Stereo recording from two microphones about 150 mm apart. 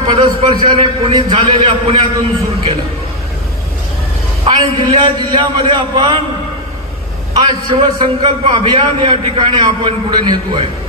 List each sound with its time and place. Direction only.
0.0 s a man's voice: 35° right (ahead or behind)
4.5 s a man's voice: 30° right (ahead or behind)
7.3 s a man's voice: 35° right (ahead or behind)